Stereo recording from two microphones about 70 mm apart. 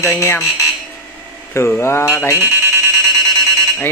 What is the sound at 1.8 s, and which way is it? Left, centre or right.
Speech, left.